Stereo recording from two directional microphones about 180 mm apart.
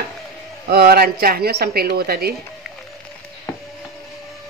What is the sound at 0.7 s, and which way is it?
A woman's voice, 60° right (ahead or behind).